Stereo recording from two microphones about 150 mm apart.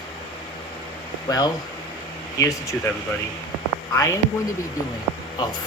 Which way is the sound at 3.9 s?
20° left (ahead or behind).